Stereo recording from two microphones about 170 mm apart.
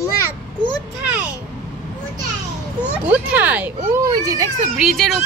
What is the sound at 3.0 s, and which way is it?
A child's voice, 10° right (ahead or behind).